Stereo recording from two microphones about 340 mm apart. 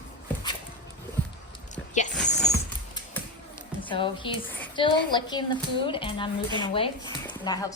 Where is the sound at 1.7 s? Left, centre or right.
Left.